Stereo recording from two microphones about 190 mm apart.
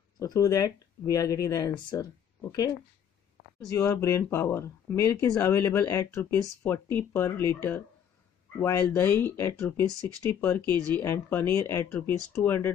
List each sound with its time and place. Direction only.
0.2 s speech: 20° left (ahead or behind)
3.7 s speech: 15° left (ahead or behind)